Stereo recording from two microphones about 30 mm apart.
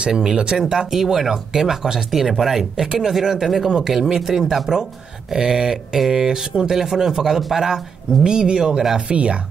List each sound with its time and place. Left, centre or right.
0.1 s speech: right
0.8 s speech: centre
6.2 s speech: right
8.2 s speech: right
9.1 s speech: right